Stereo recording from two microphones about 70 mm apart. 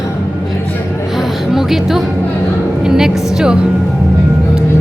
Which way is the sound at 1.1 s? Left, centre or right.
Centre.